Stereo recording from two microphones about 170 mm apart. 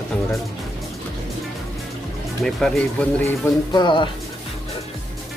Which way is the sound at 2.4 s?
5° left (ahead or behind).